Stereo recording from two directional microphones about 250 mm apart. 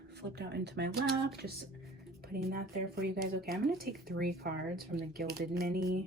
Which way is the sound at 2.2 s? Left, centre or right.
Right.